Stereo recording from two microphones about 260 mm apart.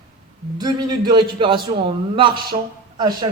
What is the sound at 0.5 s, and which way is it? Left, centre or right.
Speech, centre.